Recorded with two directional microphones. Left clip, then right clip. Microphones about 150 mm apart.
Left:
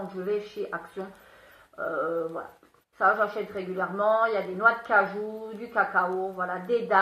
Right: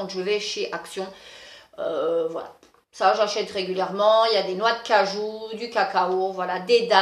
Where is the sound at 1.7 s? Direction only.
25° right (ahead or behind).